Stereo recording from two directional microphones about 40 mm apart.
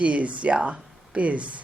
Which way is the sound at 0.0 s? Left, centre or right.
Right.